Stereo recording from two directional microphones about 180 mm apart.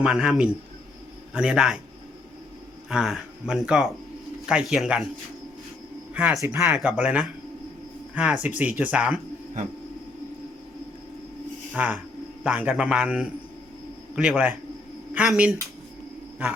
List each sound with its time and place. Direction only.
0.0 s speech: 5° right (ahead or behind)
2.9 s speech: 5° right (ahead or behind)
6.1 s speech: 5° right (ahead or behind)
11.7 s speech: 10° right (ahead or behind)